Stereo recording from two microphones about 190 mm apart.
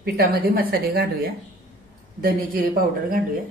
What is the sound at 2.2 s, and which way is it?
Speech, 50° right (ahead or behind).